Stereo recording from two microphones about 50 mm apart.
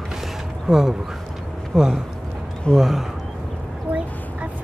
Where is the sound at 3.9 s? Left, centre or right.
Right.